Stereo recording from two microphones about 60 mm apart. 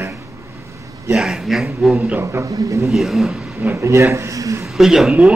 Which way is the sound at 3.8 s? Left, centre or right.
Right.